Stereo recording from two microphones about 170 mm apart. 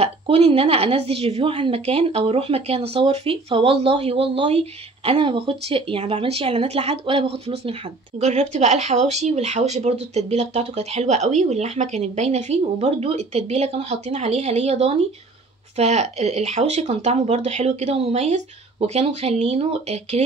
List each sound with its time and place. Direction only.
0.0 s a woman's voice: 35° right (ahead or behind)